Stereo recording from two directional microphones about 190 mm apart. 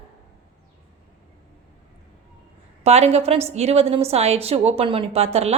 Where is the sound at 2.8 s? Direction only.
35° right (ahead or behind).